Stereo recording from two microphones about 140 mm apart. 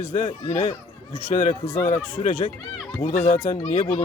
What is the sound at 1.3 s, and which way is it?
Speech, 60° left (ahead or behind).